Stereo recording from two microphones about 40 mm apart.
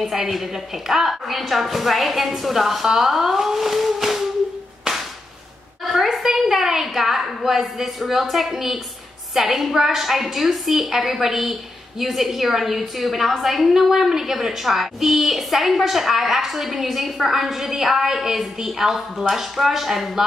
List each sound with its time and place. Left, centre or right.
0.0 s a woman's voice: centre
6.1 s a woman's voice: centre